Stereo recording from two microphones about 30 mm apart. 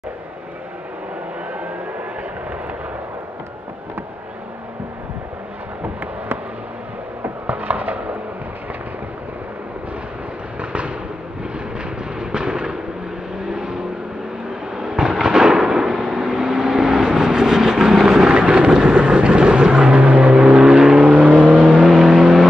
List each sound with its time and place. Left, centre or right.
7.4 s a sound: right
10.6 s fireworks: right
12.2 s fireworks: right
13.5 s vehicle: right
14.8 s a sound: right
18.3 s vehicle: right
20.0 s vehicle: right
20.5 s vehicle: right
21.1 s vehicle: right
21.5 s vehicle: centre